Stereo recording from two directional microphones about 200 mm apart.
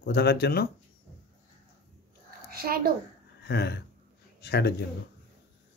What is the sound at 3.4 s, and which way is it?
Speech, 55° left (ahead or behind).